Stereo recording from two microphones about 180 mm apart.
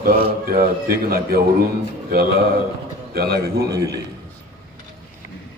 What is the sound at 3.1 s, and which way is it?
Speech, 60° right (ahead or behind).